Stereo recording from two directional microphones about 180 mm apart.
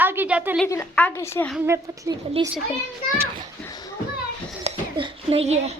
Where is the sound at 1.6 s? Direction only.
15° right (ahead or behind).